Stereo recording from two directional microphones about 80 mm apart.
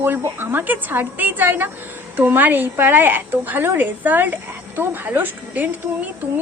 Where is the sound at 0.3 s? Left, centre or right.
Right.